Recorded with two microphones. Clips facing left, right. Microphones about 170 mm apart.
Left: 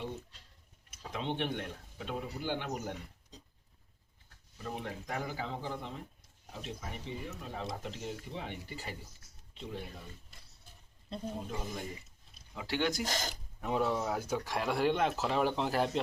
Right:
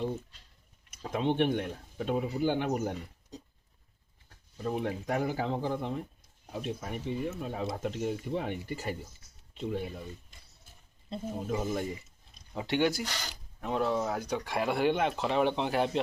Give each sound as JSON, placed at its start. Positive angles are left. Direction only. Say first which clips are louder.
{"t": 0.9, "sound": "speech", "louder": "right 7 dB", "side_deg": -45}
{"t": 4.5, "sound": "speech", "louder": "right 8 dB", "side_deg": -55}
{"t": 11.3, "sound": "speech", "louder": "right 8 dB", "side_deg": -50}
{"t": 12.6, "sound": "speech", "louder": "right 5 dB", "side_deg": -20}
{"t": 13.1, "sound": "speech", "louder": "left 4 dB", "side_deg": 45}
{"t": 13.6, "sound": "speech", "louder": "right 2 dB", "side_deg": 5}